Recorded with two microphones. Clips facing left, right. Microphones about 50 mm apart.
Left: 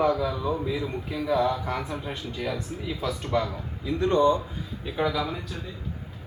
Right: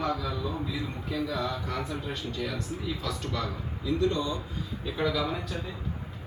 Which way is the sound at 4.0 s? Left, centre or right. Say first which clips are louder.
Left 8 dB; left.